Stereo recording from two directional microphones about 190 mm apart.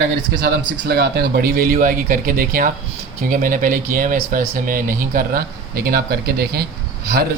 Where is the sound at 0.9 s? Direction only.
55° right (ahead or behind).